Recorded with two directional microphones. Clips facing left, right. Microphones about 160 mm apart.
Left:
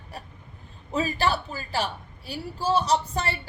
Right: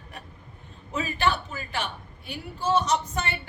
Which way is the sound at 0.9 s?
35° left (ahead or behind).